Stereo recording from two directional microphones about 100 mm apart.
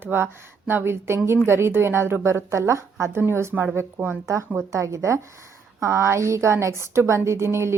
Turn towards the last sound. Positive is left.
turn(degrees=-25)  # may be behind; listen again after turning